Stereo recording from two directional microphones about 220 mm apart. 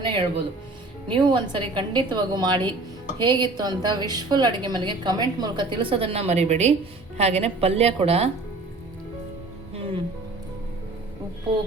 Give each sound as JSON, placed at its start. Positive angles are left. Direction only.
{"t": 0.0, "sound": "music", "side_deg": -25}
{"t": 1.0, "sound": "a woman's voice", "side_deg": -20}